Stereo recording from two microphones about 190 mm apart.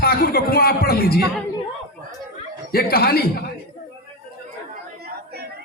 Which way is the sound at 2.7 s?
55° left (ahead or behind).